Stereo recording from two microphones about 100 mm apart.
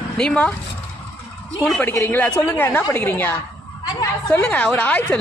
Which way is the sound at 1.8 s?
20° left (ahead or behind).